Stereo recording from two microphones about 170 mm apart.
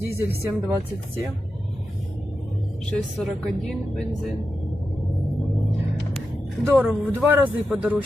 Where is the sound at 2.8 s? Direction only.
Centre (ahead or behind).